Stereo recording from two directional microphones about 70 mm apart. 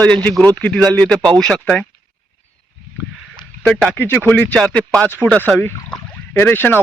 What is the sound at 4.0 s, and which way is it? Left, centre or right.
Speech, left.